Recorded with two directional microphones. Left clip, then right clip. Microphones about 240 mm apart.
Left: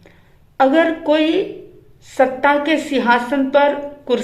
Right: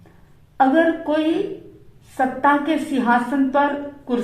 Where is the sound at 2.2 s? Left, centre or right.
Left.